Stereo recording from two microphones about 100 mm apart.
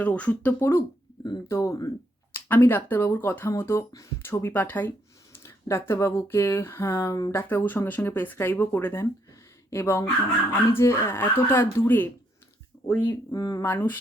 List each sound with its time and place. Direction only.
0.0 s speech: 15° left (ahead or behind)
0.6 s speech: 25° left (ahead or behind)
7.4 s speech: 20° left (ahead or behind)
13.3 s speech: 35° left (ahead or behind)
13.7 s speech: 20° left (ahead or behind)